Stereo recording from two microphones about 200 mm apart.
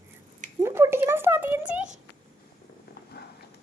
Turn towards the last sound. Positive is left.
turn(degrees=55)  # may be behind; listen again after turning